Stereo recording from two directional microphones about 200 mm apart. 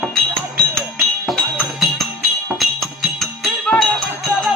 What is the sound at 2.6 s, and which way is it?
Music, centre (ahead or behind).